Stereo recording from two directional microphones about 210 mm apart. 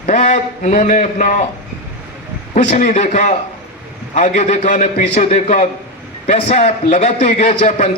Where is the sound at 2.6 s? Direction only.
35° left (ahead or behind).